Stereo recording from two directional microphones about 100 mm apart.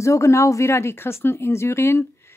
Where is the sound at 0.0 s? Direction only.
30° left (ahead or behind).